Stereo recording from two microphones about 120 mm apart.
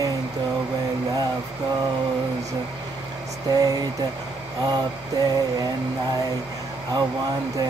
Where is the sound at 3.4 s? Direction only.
30° right (ahead or behind).